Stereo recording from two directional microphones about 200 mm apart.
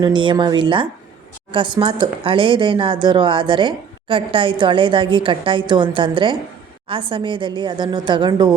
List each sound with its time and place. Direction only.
0.0 s speech: 25° right (ahead or behind)